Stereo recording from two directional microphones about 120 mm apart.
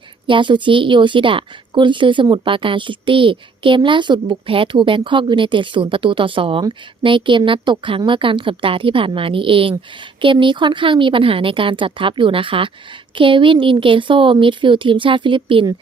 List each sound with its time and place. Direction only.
0.3 s a woman's voice: 40° right (ahead or behind)